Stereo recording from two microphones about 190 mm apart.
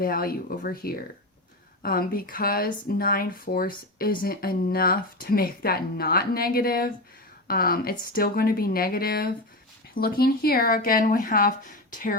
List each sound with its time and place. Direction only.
0.0 s speech: 50° left (ahead or behind)